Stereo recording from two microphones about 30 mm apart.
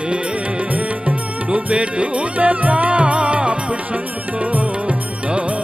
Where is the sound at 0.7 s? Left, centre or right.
Right.